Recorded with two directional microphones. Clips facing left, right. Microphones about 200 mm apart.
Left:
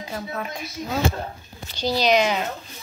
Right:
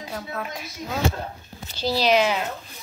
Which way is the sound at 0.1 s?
5° left (ahead or behind).